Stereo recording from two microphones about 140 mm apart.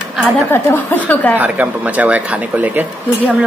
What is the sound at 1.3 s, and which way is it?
Speech, 10° right (ahead or behind).